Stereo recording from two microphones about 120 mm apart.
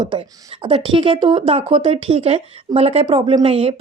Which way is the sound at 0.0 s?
45° right (ahead or behind).